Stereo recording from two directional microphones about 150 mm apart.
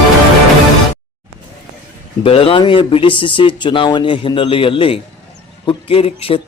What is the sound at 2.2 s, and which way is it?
Speech, 40° left (ahead or behind).